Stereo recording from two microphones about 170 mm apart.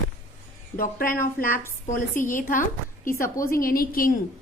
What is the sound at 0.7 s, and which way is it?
A woman's voice, 55° left (ahead or behind).